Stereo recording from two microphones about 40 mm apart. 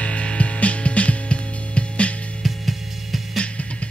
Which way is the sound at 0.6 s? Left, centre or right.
Left.